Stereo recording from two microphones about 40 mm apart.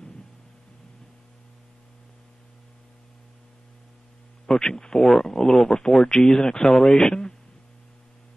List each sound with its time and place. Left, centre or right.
4.5 s speech: centre